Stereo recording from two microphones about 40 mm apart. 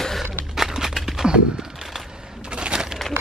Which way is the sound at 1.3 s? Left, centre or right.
Right.